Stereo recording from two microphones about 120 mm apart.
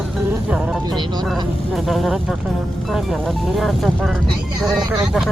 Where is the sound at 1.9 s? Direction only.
Centre (ahead or behind).